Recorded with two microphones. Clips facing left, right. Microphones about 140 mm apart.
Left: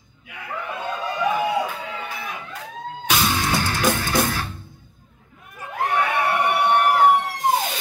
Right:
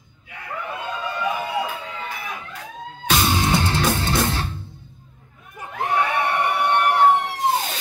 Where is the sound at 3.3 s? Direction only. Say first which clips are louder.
Right 2 dB; 25° right (ahead or behind).